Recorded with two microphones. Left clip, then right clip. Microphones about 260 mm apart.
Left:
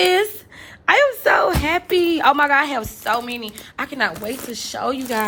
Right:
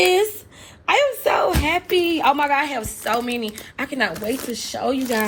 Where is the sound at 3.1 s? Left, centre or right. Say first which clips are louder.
Even; centre.